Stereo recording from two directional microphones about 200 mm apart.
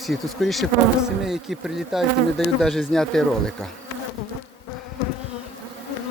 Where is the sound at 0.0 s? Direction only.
Centre (ahead or behind).